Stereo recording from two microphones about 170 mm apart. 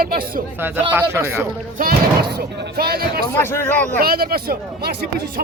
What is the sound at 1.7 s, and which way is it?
Speech, 60° right (ahead or behind).